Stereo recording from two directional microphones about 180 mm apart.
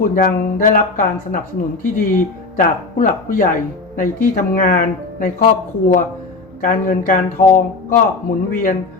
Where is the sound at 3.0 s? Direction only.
50° left (ahead or behind).